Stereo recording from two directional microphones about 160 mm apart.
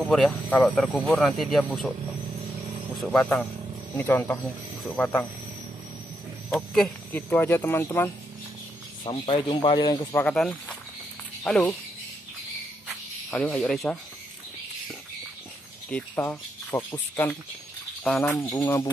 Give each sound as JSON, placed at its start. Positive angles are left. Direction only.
{"t": 0.1, "sound": "speech", "side_deg": 0}
{"t": 3.0, "sound": "speech", "side_deg": 5}
{"t": 6.5, "sound": "speech", "side_deg": 5}
{"t": 9.0, "sound": "speech", "side_deg": 35}
{"t": 10.1, "sound": "speech", "side_deg": 5}
{"t": 13.3, "sound": "speech", "side_deg": 5}
{"t": 15.9, "sound": "speech", "side_deg": 15}
{"t": 18.3, "sound": "speech", "side_deg": 15}